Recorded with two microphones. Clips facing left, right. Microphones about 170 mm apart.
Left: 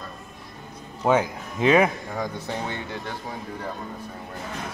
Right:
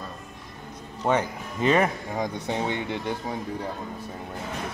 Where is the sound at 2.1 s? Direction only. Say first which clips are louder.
Right 2 dB; 20° right (ahead or behind).